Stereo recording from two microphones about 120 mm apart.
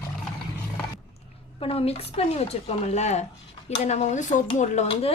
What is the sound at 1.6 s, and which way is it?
A woman's voice, 55° left (ahead or behind).